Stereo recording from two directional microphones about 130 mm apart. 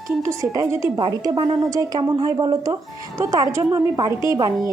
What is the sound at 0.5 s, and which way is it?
Speech, 25° right (ahead or behind).